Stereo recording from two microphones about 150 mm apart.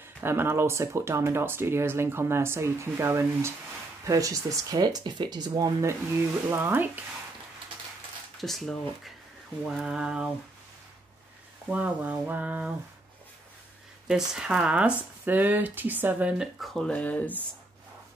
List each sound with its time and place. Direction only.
0.2 s speech: 15° right (ahead or behind)
8.4 s speech: centre (ahead or behind)
11.7 s speech: 10° right (ahead or behind)
14.0 s speech: 5° right (ahead or behind)